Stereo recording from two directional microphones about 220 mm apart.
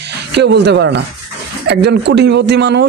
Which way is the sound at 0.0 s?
50° right (ahead or behind).